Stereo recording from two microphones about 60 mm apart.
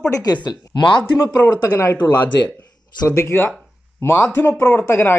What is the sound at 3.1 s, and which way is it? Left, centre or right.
Speech, left.